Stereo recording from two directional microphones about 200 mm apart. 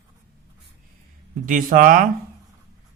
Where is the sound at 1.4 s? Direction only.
40° right (ahead or behind).